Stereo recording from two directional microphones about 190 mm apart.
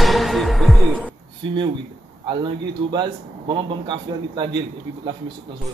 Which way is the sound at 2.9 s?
25° right (ahead or behind).